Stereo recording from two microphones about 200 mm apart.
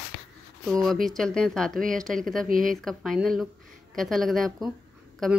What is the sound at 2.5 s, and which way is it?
Speech, 45° right (ahead or behind).